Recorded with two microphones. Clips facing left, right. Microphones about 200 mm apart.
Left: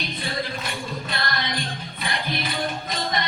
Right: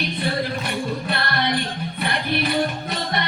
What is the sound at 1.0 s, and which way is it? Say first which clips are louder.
Music: right 5 dB; 60° right (ahead or behind).